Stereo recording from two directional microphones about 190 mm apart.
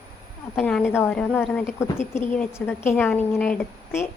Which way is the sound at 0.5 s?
5° left (ahead or behind).